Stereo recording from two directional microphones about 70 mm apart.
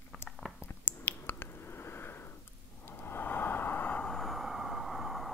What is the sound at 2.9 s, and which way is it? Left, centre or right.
Vehicle, left.